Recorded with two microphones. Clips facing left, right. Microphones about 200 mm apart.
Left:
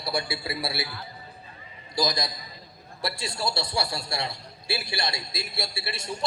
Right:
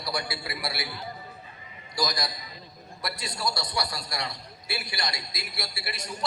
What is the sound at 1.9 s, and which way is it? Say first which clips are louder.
A man's voice: left 3 dB; 25° left (ahead or behind).